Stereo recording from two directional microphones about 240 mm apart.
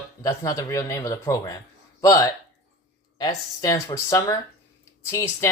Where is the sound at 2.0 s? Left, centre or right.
Centre.